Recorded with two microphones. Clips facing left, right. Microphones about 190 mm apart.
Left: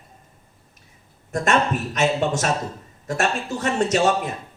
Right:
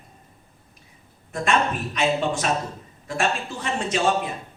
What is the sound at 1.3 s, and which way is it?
Speech, 45° left (ahead or behind).